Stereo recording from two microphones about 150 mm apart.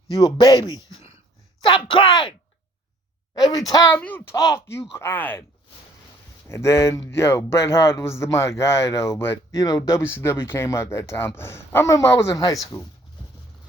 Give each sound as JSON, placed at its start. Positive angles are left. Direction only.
{"t": 0.1, "sound": "speech", "side_deg": 25}
{"t": 3.3, "sound": "speech", "side_deg": 25}
{"t": 6.5, "sound": "speech", "side_deg": 20}